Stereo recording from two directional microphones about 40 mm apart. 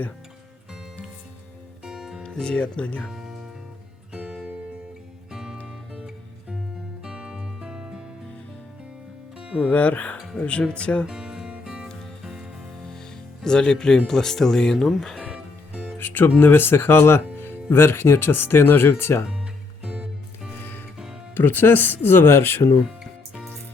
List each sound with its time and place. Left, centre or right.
1.8 s music: centre
2.2 s speech: left
3.1 s music: centre
4.1 s music: centre
9.6 s speech: left
11.0 s music: centre
13.4 s speech: left
16.0 s music: left
16.4 s speech: left
17.3 s speech: left
19.8 s music: right
20.6 s music: left
21.3 s speech: left